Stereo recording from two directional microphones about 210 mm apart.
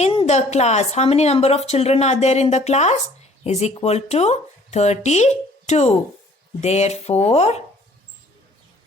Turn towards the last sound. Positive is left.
turn(degrees=30)  # may be behind; listen again after turning